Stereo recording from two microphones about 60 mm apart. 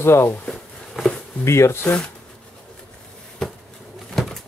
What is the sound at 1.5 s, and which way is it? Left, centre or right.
Speech, left.